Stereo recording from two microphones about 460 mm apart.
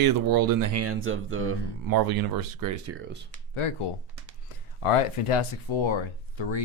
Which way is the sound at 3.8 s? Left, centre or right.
Left.